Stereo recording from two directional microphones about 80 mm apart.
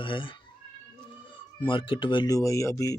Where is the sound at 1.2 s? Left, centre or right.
Left.